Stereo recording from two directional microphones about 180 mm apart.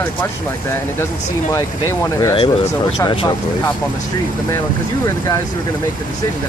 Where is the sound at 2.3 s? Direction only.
30° left (ahead or behind).